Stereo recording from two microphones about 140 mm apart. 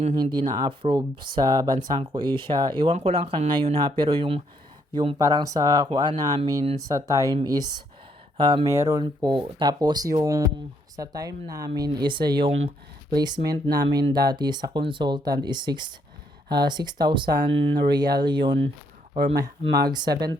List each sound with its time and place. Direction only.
0.2 s speech: 30° right (ahead or behind)
4.9 s speech: 30° right (ahead or behind)
8.6 s speech: 20° right (ahead or behind); by 12.7 s 40° right (ahead or behind)
13.1 s speech: 30° right (ahead or behind)